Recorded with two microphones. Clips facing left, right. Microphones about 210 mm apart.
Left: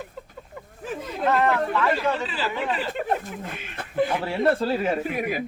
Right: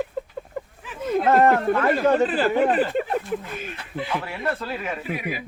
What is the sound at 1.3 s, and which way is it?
Speech, 45° right (ahead or behind).